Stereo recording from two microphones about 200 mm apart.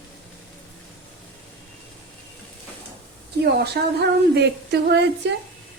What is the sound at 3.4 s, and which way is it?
Speech, 55° right (ahead or behind).